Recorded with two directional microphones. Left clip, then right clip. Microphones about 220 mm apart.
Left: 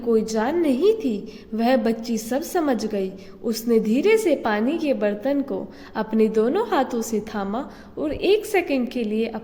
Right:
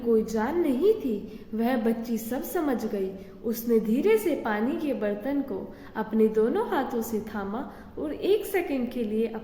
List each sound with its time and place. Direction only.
0.1 s a woman's voice: 40° left (ahead or behind)